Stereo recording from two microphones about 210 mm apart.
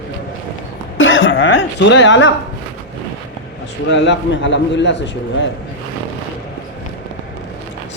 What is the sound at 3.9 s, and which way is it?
A man's voice, 60° left (ahead or behind).